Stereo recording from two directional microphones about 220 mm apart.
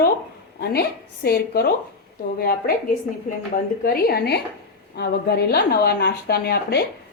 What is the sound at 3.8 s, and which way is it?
A woman's voice, 45° left (ahead or behind).